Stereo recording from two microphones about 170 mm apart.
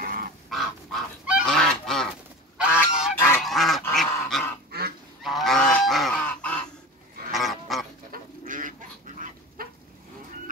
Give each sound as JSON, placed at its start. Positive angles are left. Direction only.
{"t": 0.0, "sound": "bird", "side_deg": -55}
{"t": 0.5, "sound": "goose", "side_deg": 0}
{"t": 3.2, "sound": "goose", "side_deg": 15}
{"t": 3.4, "sound": "duck", "side_deg": 0}
{"t": 3.9, "sound": "dog", "side_deg": 0}
{"t": 4.6, "sound": "goose", "side_deg": -65}
{"t": 5.2, "sound": "goose", "side_deg": 0}
{"t": 7.3, "sound": "duck", "side_deg": 0}
{"t": 8.1, "sound": "goose", "side_deg": -50}